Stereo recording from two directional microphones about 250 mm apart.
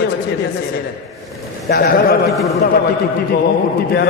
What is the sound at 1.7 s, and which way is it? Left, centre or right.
Speech, left.